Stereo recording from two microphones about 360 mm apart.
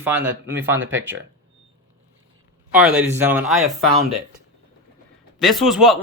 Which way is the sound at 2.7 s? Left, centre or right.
Centre.